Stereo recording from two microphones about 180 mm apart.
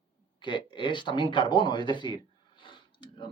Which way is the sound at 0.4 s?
25° left (ahead or behind).